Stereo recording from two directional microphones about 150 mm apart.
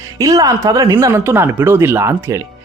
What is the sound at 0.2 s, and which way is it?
Speech, 25° right (ahead or behind).